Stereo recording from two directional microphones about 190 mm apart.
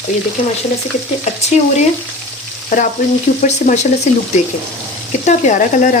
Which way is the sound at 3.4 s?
40° left (ahead or behind).